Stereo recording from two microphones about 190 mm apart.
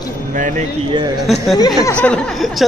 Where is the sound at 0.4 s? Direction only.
45° right (ahead or behind).